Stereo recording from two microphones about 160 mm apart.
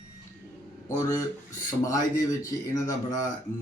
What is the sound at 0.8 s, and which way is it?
Speech, 20° left (ahead or behind).